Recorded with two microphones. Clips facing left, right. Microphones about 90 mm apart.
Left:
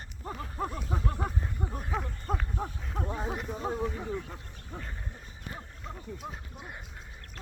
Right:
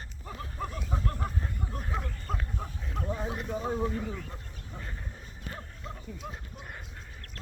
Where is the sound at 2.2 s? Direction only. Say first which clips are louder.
Left 3 dB; 30° left (ahead or behind).